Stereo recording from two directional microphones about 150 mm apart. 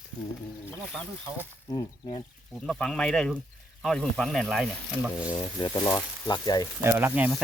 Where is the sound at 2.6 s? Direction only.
5° left (ahead or behind).